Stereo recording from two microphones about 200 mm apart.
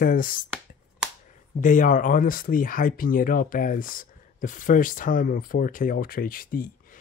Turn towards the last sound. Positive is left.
turn(degrees=45)  # may be behind; listen again after turning